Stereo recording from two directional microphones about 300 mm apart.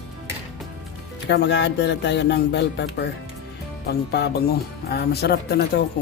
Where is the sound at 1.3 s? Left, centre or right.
Left.